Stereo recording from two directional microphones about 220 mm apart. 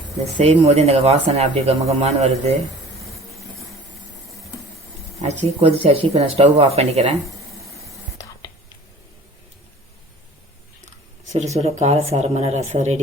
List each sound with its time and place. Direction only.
0.3 s speech: 30° right (ahead or behind)
5.2 s speech: 30° right (ahead or behind)
11.3 s speech: 30° right (ahead or behind)